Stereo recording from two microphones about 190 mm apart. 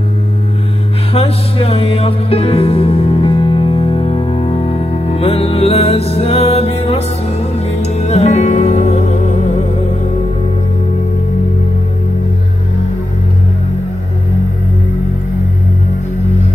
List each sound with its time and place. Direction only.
1.1 s music: 30° left (ahead or behind)